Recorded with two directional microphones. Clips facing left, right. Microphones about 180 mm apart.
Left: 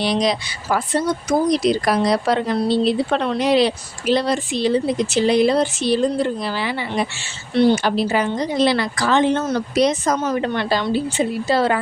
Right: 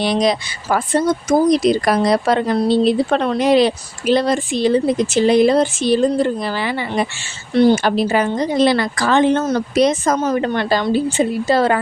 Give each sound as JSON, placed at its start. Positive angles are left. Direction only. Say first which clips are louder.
{"t": 0.0, "sound": "speech", "louder": "right 3 dB", "side_deg": -50}